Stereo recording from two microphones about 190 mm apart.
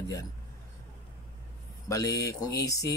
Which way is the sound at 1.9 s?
15° left (ahead or behind).